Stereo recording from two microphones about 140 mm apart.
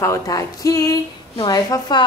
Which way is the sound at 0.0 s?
25° left (ahead or behind).